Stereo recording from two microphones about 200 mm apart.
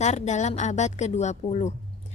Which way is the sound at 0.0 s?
35° left (ahead or behind).